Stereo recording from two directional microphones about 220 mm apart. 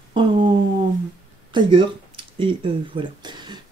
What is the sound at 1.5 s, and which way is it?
Speech, 20° right (ahead or behind).